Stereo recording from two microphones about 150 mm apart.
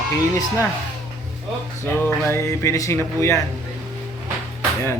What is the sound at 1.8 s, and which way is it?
Speech, 15° left (ahead or behind).